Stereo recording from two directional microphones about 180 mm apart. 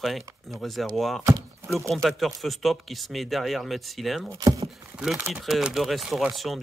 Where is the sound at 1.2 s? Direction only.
15° right (ahead or behind).